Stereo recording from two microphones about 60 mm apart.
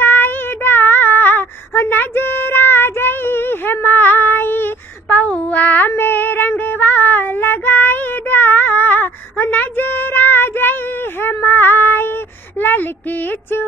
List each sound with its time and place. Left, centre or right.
0.0 s child singing: left
5.1 s female singing: left
12.5 s a sound: left